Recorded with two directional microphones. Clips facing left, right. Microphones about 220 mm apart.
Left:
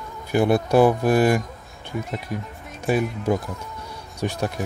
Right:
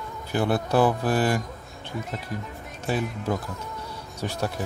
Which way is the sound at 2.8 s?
15° left (ahead or behind).